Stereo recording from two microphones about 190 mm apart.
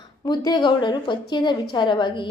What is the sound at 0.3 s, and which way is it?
A woman's voice, 25° left (ahead or behind).